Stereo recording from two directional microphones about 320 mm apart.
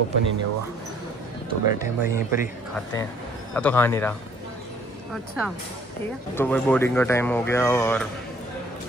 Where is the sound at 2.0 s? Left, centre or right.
Left.